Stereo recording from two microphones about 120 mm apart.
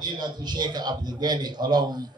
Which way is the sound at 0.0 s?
35° right (ahead or behind).